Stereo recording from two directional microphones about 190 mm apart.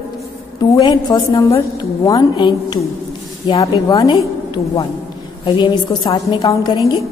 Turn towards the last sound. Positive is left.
turn(degrees=20)  # may be behind; listen again after turning